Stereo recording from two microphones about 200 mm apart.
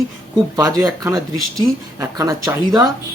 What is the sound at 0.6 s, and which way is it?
Speech, 15° right (ahead or behind).